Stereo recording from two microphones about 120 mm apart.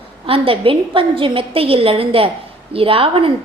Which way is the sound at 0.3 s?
50° right (ahead or behind).